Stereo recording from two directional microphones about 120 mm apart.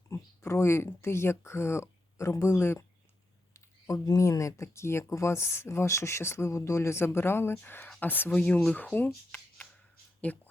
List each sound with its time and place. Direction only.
0.1 s speech: 20° left (ahead or behind)
4.0 s speech: 30° left (ahead or behind)
10.2 s a sound: 10° left (ahead or behind)